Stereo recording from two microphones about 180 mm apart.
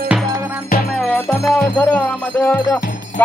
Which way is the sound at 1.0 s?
Centre (ahead or behind).